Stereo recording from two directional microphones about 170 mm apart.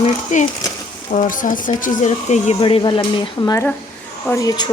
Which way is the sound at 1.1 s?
50° left (ahead or behind).